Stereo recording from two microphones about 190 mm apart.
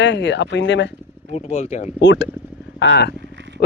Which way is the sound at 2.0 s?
70° left (ahead or behind).